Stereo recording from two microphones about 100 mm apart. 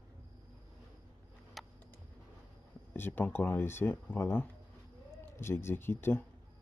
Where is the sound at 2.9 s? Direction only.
20° left (ahead or behind).